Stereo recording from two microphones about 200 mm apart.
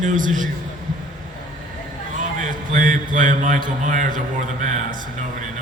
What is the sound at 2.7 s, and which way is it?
A woman's voice, 40° right (ahead or behind).